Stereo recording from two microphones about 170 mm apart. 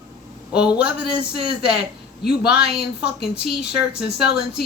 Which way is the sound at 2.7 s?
70° left (ahead or behind).